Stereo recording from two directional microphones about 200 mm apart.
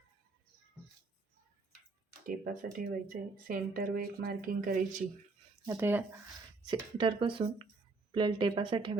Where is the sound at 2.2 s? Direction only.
45° right (ahead or behind).